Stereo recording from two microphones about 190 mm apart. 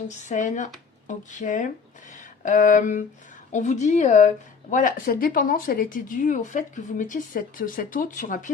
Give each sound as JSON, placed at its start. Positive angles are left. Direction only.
{"t": 0.1, "sound": "speech", "side_deg": 40}
{"t": 2.1, "sound": "a sound", "side_deg": 40}
{"t": 3.5, "sound": "speech", "side_deg": 40}